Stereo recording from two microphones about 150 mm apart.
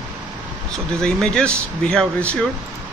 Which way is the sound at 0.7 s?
5° left (ahead or behind).